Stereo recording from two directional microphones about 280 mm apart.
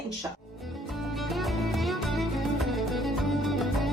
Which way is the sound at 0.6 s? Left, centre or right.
Centre.